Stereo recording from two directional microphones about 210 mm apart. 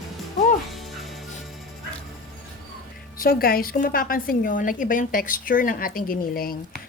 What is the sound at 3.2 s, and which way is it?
A woman's voice, 45° left (ahead or behind).